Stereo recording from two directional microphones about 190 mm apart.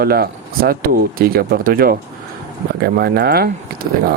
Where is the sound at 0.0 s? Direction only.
55° right (ahead or behind).